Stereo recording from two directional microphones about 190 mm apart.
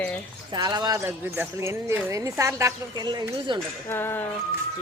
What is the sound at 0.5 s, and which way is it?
Speech, 20° right (ahead or behind).